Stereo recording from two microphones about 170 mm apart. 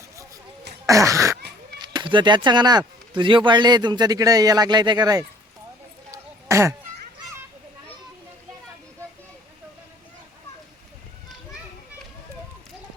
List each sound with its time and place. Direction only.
0.9 s a sound: 20° right (ahead or behind)
1.8 s speech: 25° right (ahead or behind)
6.1 s throat clearing: 15° right (ahead or behind)